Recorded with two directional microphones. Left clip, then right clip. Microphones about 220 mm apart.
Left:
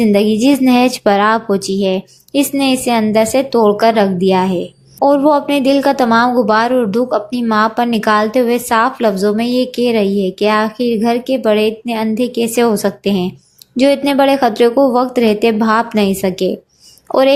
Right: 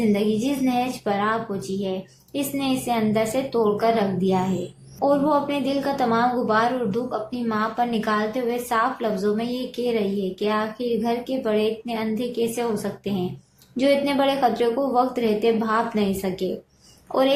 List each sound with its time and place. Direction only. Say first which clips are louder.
0.0 s a woman's voice: left 10 dB; 40° left (ahead or behind)